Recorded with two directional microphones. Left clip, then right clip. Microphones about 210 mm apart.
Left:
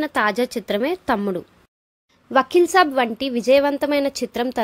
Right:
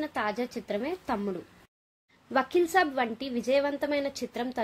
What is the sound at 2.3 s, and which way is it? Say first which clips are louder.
A woman's voice: left 9 dB; 25° left (ahead or behind).